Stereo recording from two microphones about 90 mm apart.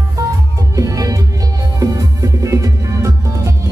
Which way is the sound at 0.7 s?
40° right (ahead or behind).